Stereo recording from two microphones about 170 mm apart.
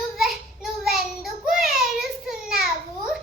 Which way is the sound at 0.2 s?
Centre (ahead or behind).